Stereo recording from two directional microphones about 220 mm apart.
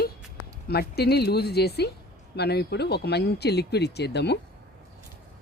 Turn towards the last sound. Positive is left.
turn(degrees=50)  # may be behind; listen again after turning